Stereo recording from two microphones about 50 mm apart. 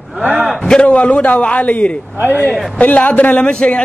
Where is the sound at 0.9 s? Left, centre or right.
Left.